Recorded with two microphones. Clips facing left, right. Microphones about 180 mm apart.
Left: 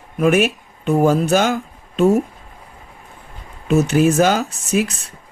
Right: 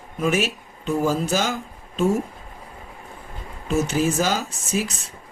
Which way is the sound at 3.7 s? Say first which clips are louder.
Left 7 dB; 65° left (ahead or behind).